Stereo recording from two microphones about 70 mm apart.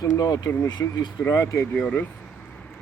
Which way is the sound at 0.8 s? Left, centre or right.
Left.